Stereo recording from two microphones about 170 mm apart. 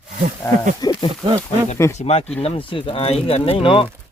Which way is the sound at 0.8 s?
25° left (ahead or behind).